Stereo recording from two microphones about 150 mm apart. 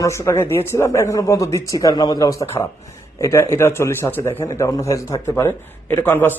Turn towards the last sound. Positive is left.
turn(degrees=15)  # may be behind; listen again after turning